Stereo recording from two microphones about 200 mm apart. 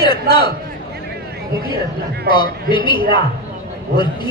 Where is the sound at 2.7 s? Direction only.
25° left (ahead or behind).